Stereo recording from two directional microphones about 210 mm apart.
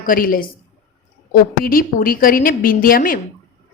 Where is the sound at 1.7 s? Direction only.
45° left (ahead or behind).